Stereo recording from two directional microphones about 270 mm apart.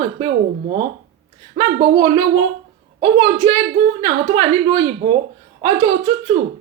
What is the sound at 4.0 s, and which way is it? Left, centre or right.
A woman's voice, centre.